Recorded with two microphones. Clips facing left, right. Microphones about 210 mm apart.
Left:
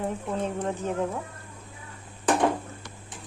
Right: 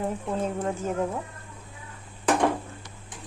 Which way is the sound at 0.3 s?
5° right (ahead or behind).